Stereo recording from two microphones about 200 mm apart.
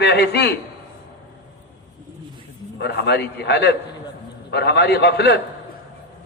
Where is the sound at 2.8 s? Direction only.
55° left (ahead or behind).